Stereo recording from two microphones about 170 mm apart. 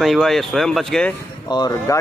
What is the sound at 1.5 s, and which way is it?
Speech, 25° left (ahead or behind).